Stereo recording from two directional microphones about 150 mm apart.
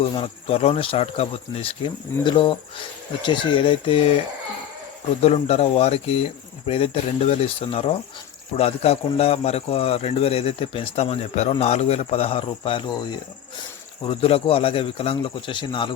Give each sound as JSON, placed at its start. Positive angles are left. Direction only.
{"t": 0.0, "sound": "speech", "side_deg": 40}
{"t": 2.2, "sound": "a man's voice", "side_deg": 35}
{"t": 5.2, "sound": "a man's voice", "side_deg": 45}
{"t": 14.0, "sound": "a man's voice", "side_deg": 40}